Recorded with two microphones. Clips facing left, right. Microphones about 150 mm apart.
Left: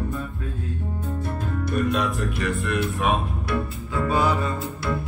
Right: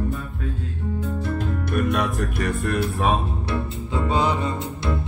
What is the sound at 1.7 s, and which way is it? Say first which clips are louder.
Speech: even; 60° right (ahead or behind).